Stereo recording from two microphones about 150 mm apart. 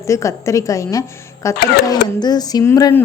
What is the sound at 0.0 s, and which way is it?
A woman's voice, 20° left (ahead or behind).